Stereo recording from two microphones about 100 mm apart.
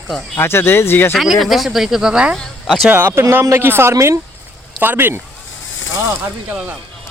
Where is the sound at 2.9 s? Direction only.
20° right (ahead or behind).